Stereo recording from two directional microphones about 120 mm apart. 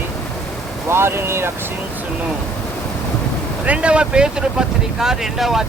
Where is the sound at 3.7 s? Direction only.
10° right (ahead or behind).